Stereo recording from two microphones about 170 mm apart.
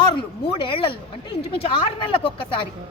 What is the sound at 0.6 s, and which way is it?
Speech, 30° left (ahead or behind).